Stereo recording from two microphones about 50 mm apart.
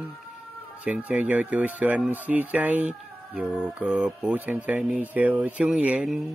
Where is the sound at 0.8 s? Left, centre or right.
Right.